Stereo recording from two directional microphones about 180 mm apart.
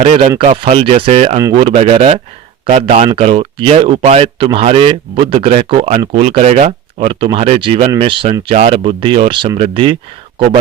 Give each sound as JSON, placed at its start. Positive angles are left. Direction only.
{"t": 0.0, "sound": "speech", "side_deg": -30}